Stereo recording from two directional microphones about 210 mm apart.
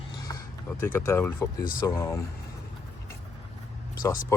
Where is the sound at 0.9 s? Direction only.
10° left (ahead or behind).